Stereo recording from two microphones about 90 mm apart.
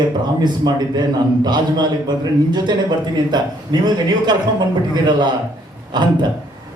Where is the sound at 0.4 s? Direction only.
55° right (ahead or behind).